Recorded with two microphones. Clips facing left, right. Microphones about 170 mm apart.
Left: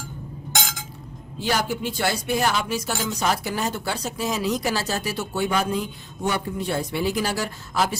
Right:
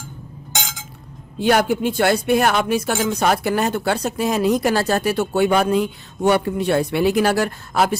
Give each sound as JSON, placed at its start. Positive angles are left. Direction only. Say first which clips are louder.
{"t": 1.4, "sound": "speech", "louder": "right 8 dB", "side_deg": -60}